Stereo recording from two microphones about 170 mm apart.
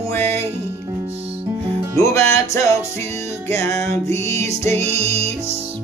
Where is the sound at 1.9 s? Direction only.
15° left (ahead or behind).